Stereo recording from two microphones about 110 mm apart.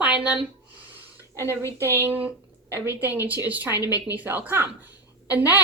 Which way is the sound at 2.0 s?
20° right (ahead or behind).